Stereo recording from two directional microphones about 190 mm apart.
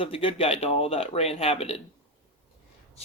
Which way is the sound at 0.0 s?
30° left (ahead or behind).